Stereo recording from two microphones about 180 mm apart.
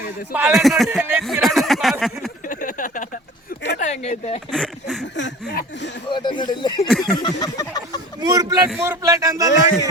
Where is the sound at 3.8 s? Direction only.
40° left (ahead or behind).